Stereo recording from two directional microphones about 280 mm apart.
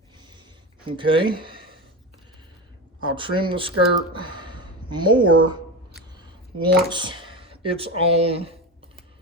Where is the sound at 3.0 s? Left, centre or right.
Centre.